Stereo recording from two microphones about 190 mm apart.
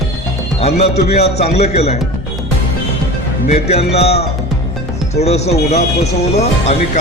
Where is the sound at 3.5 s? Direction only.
35° left (ahead or behind).